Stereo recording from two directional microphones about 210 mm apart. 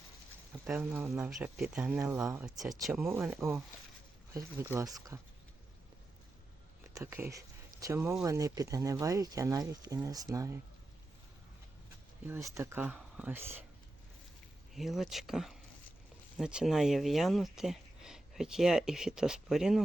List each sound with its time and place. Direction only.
0.7 s speech: 10° right (ahead or behind)
2.8 s speech: centre (ahead or behind); by 5.2 s 15° right (ahead or behind)
6.9 s speech: 10° right (ahead or behind)
12.2 s speech: 10° right (ahead or behind)
14.8 s speech: centre (ahead or behind)